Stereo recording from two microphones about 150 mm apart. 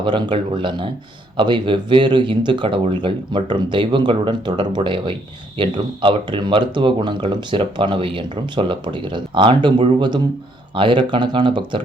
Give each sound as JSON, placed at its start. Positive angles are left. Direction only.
{"t": 0.0, "sound": "speech", "side_deg": -30}